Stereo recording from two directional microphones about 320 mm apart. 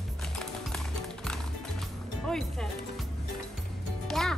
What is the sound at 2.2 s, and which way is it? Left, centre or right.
Music, centre.